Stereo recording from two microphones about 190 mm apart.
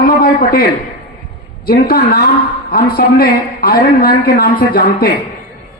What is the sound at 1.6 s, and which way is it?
A man's voice, 55° left (ahead or behind).